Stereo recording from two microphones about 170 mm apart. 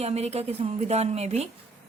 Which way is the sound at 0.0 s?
40° right (ahead or behind).